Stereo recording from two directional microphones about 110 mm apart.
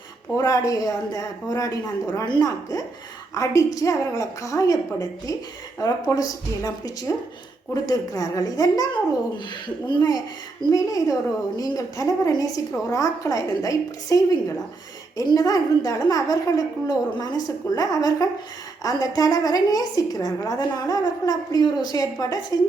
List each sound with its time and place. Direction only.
0.3 s a woman's voice: 30° left (ahead or behind)
10.6 s a woman's voice: 30° left (ahead or behind)